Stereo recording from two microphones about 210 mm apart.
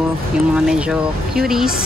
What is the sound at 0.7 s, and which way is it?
Speech, centre (ahead or behind).